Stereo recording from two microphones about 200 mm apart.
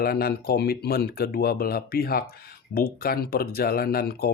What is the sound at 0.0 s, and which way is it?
Speech, 50° left (ahead or behind).